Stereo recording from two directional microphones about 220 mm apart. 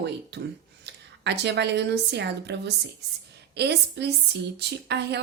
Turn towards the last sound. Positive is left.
turn(degrees=-50)  # may be behind; listen again after turning